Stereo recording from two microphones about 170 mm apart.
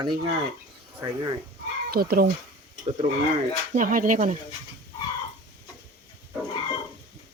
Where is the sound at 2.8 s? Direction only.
40° right (ahead or behind).